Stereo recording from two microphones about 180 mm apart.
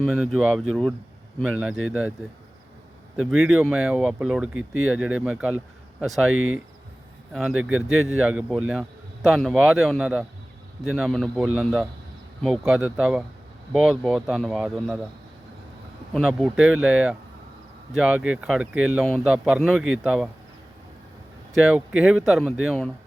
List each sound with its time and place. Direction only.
0.0 s a man's voice: centre (ahead or behind)
3.2 s a man's voice: centre (ahead or behind)
7.3 s a man's voice: 5° right (ahead or behind)
16.1 s a man's voice: centre (ahead or behind)
21.5 s a man's voice: 5° right (ahead or behind)